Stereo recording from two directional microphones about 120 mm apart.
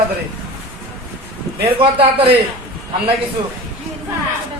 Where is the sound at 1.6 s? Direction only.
50° right (ahead or behind).